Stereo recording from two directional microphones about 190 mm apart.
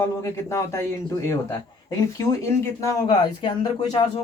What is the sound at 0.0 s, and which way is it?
A man's voice, 15° left (ahead or behind).